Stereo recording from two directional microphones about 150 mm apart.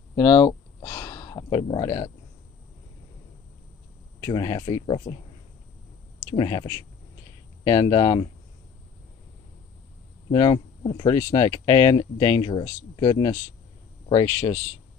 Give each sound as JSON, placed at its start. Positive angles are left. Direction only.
{"t": 0.1, "sound": "a sound", "side_deg": 35}
{"t": 4.2, "sound": "speech", "side_deg": 30}
{"t": 6.3, "sound": "speech", "side_deg": 30}
{"t": 10.3, "sound": "speech", "side_deg": 30}